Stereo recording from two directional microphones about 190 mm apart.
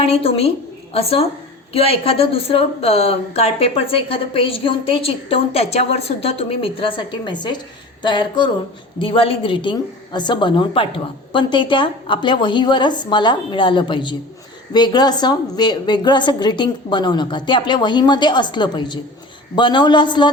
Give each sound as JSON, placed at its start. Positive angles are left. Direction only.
{"t": 0.0, "sound": "a woman's voice", "side_deg": 30}